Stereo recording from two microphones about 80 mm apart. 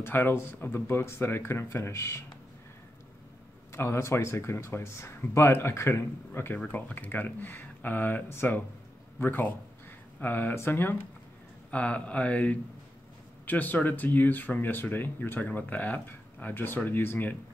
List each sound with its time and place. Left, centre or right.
0.0 s speech: left
3.7 s speech: left